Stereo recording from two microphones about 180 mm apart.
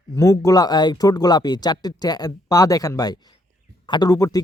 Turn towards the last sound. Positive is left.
turn(degrees=20)  # may be behind; listen again after turning